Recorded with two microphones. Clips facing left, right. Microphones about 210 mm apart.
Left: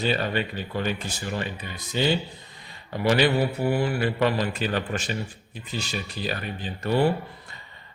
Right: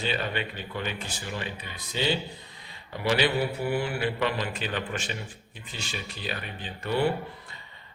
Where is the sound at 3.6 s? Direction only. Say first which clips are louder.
Left 4 dB; 40° left (ahead or behind).